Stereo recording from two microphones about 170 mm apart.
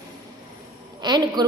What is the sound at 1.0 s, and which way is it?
Speech, 25° right (ahead or behind).